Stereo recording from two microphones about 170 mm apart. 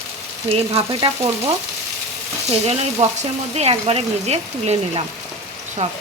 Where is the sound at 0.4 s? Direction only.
35° right (ahead or behind).